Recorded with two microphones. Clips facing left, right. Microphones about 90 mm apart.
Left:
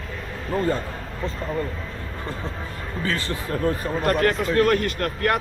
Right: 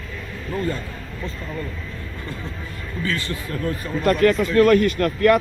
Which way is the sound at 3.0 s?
35° left (ahead or behind).